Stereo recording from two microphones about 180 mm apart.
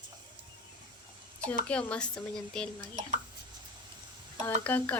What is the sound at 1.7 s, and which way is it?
A woman's voice, 5° left (ahead or behind).